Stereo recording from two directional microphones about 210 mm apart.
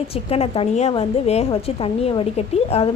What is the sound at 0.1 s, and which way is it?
A woman's voice, 30° left (ahead or behind).